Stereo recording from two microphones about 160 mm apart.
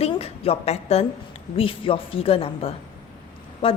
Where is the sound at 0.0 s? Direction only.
40° left (ahead or behind).